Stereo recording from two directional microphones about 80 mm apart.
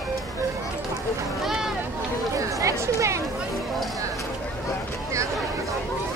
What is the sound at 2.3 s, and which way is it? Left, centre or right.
Chatter, right.